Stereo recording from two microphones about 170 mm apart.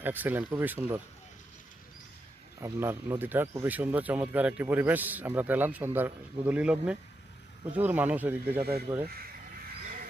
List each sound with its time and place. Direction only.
0.0 s speech: 10° right (ahead or behind)
2.6 s speech: 15° right (ahead or behind)